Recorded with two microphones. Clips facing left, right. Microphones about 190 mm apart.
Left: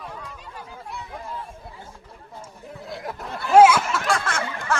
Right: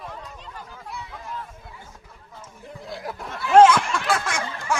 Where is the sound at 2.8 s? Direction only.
Centre (ahead or behind).